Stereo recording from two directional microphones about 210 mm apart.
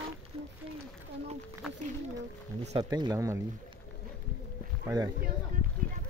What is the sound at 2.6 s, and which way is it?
Speech, 30° right (ahead or behind).